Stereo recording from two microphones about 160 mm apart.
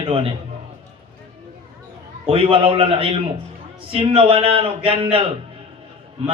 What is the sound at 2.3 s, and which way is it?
A man's voice, 35° right (ahead or behind).